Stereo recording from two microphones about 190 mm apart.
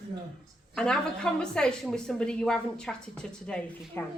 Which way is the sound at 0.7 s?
5° left (ahead or behind).